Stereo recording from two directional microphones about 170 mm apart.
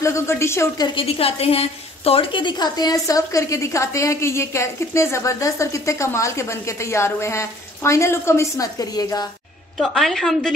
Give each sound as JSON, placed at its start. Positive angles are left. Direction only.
{"t": 0.0, "sound": "a woman's voice", "side_deg": 15}
{"t": 9.8, "sound": "a woman's voice", "side_deg": 0}